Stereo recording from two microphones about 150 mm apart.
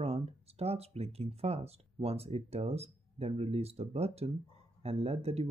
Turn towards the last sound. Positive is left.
turn(degrees=-45)  # may be behind; listen again after turning